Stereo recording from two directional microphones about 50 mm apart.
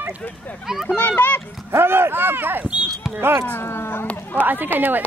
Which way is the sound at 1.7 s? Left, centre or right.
Right.